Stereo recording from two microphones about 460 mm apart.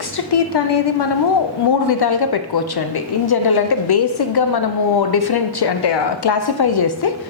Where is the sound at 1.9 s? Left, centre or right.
Left.